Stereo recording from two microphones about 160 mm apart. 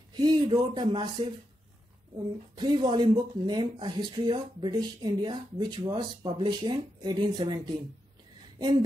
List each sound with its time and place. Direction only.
0.1 s speech: 25° right (ahead or behind)
8.5 s speech: 30° right (ahead or behind)